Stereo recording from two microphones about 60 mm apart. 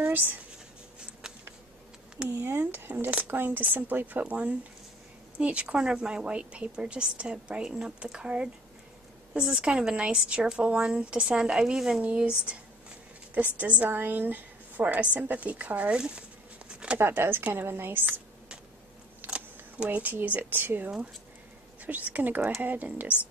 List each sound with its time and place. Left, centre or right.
2.2 s speech: right
2.6 s a woman's voice: right; by 12.0 s centre
12.0 s a woman's voice: right
16.0 s a sound: centre
17.0 s a woman's voice: right
18.0 s computer keyboard: right
19.2 s speech: right